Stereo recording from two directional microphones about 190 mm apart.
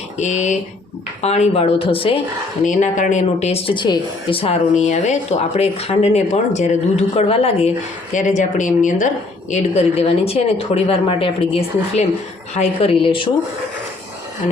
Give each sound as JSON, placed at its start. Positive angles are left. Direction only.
{"t": 0.2, "sound": "speech", "side_deg": 35}
{"t": 2.6, "sound": "speech", "side_deg": 40}